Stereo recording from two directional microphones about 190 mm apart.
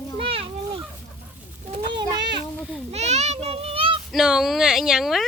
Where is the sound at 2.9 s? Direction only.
35° right (ahead or behind).